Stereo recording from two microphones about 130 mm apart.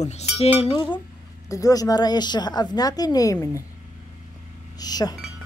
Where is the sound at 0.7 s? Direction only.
40° left (ahead or behind).